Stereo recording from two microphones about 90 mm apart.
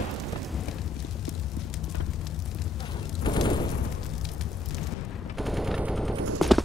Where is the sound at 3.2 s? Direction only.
55° left (ahead or behind).